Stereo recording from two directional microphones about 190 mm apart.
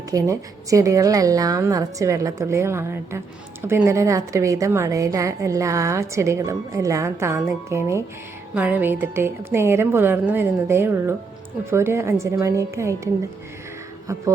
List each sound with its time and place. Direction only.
0.1 s a woman's voice: 15° right (ahead or behind)
14.1 s a woman's voice: 15° right (ahead or behind)